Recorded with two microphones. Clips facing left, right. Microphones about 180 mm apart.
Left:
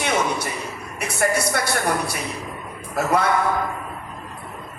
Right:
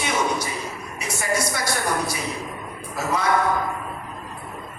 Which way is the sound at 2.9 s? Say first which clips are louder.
Left 5 dB; 60° left (ahead or behind).